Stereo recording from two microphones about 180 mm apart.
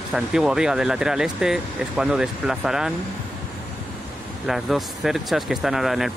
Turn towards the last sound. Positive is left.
turn(degrees=0)  # may be behind; listen again after turning